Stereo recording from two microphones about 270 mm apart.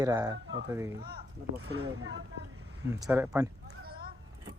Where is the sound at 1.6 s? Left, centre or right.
Right.